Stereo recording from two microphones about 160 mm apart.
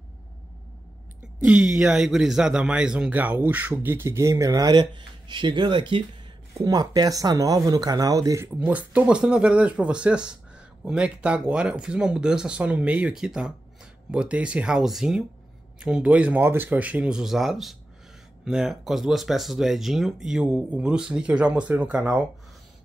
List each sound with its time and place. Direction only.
1.4 s speech: 5° right (ahead or behind); by 8.5 s 20° right (ahead or behind)
8.5 s speech: 10° right (ahead or behind)